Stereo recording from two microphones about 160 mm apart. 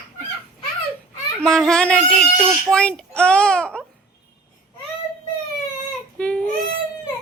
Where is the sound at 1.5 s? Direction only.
5° left (ahead or behind).